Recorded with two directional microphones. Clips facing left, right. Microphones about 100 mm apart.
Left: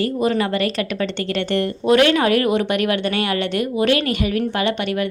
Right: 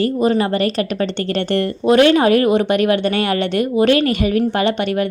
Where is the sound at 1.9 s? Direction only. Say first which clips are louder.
Right 3 dB; 30° right (ahead or behind).